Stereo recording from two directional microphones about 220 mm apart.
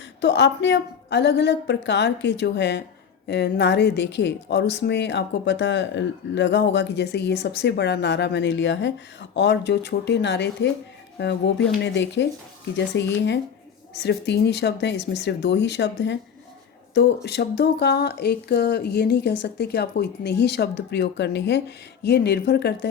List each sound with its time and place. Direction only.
0.2 s speech: 55° left (ahead or behind)